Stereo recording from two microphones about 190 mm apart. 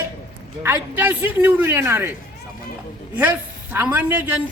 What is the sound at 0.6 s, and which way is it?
A man's voice, 10° right (ahead or behind).